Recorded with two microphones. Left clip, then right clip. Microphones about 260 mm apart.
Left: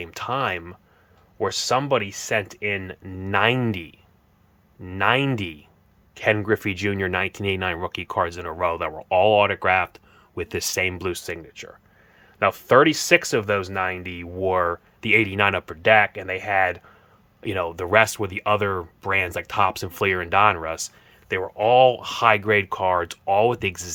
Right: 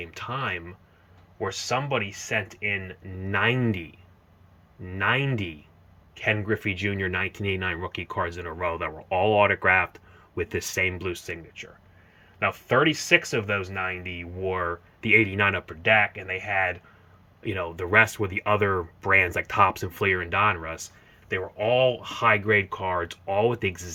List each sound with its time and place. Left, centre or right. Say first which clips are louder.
0.0 s speech: left 6 dB; centre